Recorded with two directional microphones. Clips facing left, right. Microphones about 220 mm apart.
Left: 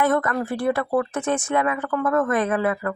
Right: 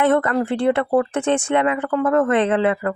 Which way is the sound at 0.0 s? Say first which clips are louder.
Right 4 dB; 30° right (ahead or behind).